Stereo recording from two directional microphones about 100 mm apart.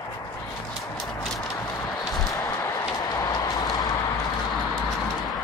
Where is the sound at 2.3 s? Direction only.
45° left (ahead or behind).